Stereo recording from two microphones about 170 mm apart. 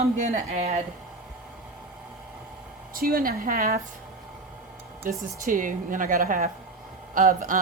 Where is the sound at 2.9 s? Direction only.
60° right (ahead or behind).